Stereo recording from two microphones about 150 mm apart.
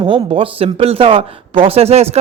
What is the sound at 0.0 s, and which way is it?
Speech, 35° right (ahead or behind).